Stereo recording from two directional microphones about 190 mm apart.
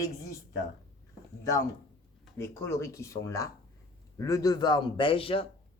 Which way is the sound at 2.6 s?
15° left (ahead or behind).